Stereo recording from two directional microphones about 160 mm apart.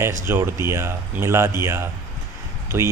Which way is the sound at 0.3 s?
15° right (ahead or behind).